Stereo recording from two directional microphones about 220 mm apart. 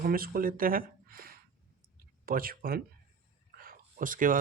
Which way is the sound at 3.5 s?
40° right (ahead or behind).